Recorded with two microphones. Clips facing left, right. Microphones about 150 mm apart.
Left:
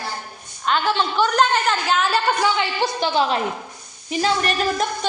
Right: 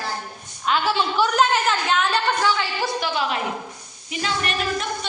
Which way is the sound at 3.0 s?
30° left (ahead or behind).